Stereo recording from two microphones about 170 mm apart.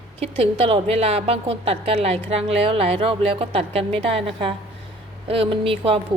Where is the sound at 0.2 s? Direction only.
35° right (ahead or behind).